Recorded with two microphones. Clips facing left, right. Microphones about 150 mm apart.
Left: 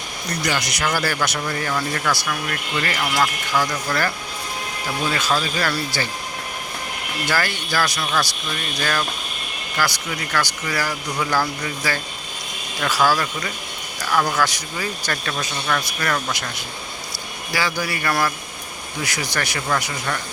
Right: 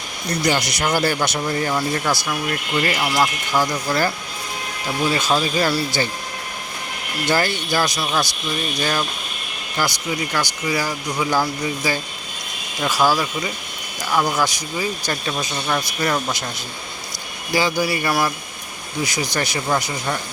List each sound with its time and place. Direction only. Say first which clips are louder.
0.4 s speech: right 3 dB; 30° right (ahead or behind)
3.0 s speech: right 2 dB; 15° right (ahead or behind)
5.1 s speech: right 3 dB; 20° right (ahead or behind)
7.3 s speech: right 4 dB; 20° right (ahead or behind)
17.5 s speech: right 5 dB; 20° right (ahead or behind)